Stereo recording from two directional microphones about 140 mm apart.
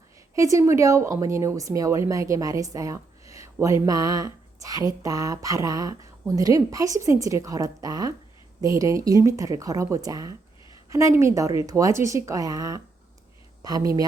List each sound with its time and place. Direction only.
0.3 s speech: 25° right (ahead or behind)